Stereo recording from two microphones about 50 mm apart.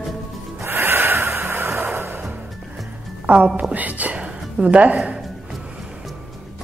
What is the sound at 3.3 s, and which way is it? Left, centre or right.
Speech, right.